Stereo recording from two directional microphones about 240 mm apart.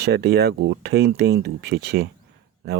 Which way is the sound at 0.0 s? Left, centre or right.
Right.